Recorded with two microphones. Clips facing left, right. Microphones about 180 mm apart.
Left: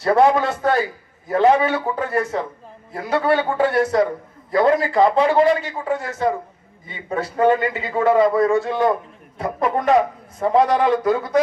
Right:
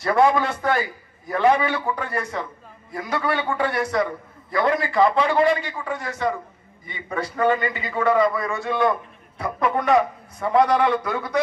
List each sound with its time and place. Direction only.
0.0 s a man's voice: 35° left (ahead or behind)